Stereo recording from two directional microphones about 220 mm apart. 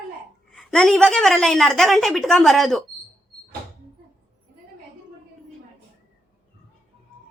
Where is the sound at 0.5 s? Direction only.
Centre (ahead or behind).